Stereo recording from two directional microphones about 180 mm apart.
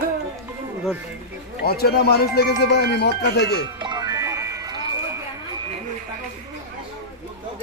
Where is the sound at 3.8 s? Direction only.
20° right (ahead or behind).